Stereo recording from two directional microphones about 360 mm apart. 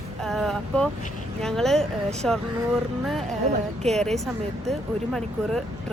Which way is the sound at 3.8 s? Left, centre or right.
Centre.